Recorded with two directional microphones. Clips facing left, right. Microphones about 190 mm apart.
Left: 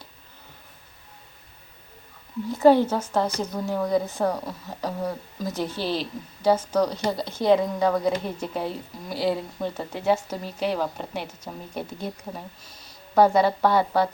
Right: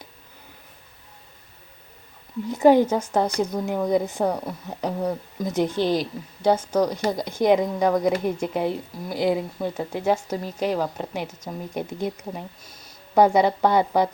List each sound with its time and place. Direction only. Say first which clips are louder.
2.5 s speech: right 1 dB; 15° right (ahead or behind)
13.1 s speech: right 1 dB; 15° right (ahead or behind)